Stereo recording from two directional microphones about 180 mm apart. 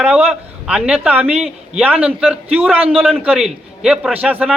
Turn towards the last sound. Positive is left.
turn(degrees=-5)  # may be behind; listen again after turning